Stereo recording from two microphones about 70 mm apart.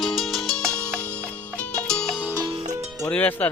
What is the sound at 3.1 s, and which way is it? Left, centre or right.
Music, left.